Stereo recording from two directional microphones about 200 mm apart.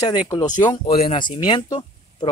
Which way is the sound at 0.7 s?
30° left (ahead or behind).